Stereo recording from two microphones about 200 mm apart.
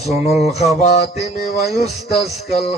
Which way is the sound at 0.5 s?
30° left (ahead or behind).